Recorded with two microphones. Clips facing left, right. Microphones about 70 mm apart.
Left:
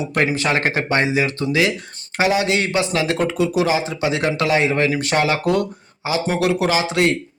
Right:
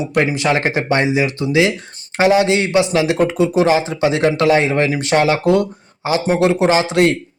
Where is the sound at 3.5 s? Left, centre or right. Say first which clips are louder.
Right 4 dB; right.